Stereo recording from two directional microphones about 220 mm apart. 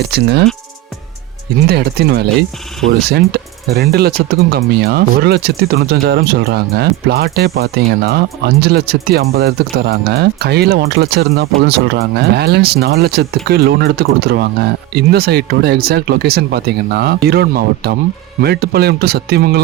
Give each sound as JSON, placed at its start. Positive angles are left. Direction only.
{"t": 0.0, "sound": "speech", "side_deg": -50}
{"t": 1.6, "sound": "speech", "side_deg": -45}
{"t": 3.8, "sound": "speech", "side_deg": -45}